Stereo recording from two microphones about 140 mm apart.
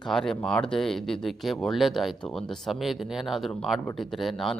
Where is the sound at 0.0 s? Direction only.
5° left (ahead or behind).